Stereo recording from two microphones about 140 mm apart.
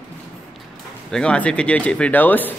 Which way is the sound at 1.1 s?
5° left (ahead or behind).